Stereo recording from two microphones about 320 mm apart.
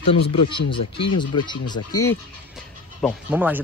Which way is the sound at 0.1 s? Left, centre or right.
Centre.